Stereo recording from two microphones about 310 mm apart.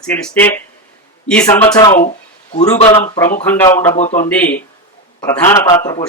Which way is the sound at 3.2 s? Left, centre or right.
Centre.